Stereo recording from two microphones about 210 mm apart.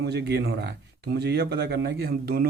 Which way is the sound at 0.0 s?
50° right (ahead or behind).